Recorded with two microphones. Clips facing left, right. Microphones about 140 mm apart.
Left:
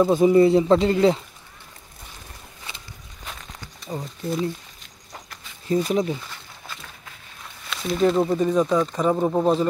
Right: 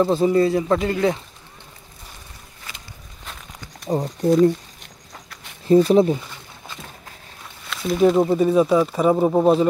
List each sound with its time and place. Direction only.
0.0 s speech: 15° left (ahead or behind)
3.8 s speech: 40° right (ahead or behind)
5.7 s speech: 35° right (ahead or behind)
7.7 s speech: 5° right (ahead or behind)